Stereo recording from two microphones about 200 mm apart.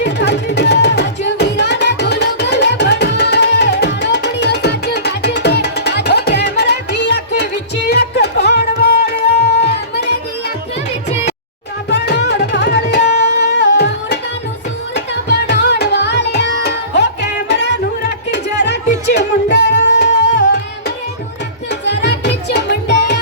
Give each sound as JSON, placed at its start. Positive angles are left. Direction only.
{"t": 0.0, "sound": "music", "side_deg": 60}
{"t": 11.9, "sound": "music", "side_deg": 60}
{"t": 21.7, "sound": "music", "side_deg": 60}